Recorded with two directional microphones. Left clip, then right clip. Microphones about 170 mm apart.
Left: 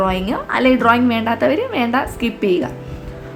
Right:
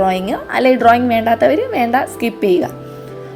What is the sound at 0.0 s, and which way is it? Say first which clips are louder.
A woman's voice: right 3 dB; 15° right (ahead or behind).